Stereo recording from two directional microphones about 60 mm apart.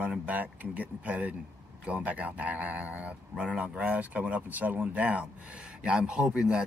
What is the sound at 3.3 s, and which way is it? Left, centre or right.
Speech, centre.